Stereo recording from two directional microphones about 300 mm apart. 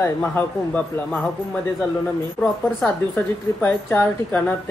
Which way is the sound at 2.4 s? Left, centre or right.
Centre.